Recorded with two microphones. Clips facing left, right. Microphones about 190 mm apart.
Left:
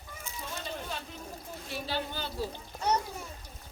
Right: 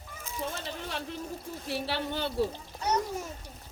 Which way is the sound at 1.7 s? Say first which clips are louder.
Right 3 dB; 70° right (ahead or behind).